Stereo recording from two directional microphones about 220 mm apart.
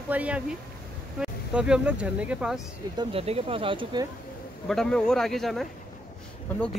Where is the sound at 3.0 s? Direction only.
25° right (ahead or behind).